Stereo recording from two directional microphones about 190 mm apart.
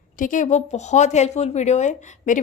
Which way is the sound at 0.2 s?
45° left (ahead or behind).